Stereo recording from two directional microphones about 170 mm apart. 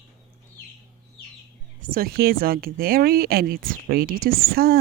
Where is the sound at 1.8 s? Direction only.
55° right (ahead or behind).